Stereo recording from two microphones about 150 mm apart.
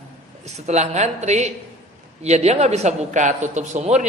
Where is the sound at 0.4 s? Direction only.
50° right (ahead or behind).